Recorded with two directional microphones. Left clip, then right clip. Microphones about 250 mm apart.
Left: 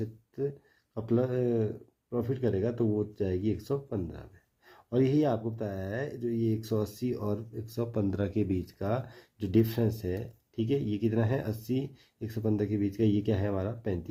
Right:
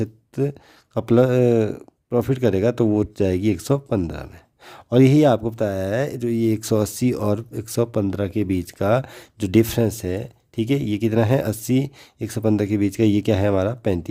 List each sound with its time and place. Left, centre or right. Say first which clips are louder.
0.0 s speech: right 10 dB; right